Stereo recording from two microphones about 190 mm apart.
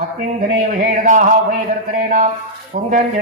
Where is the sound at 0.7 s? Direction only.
45° right (ahead or behind).